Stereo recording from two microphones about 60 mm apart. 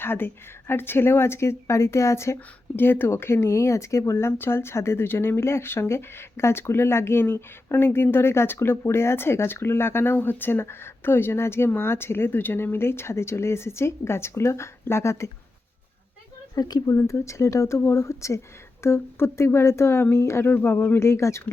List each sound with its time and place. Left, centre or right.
0.0 s speech: left
16.6 s speech: left
17.1 s speech: left
20.5 s speech: left
21.1 s speech: left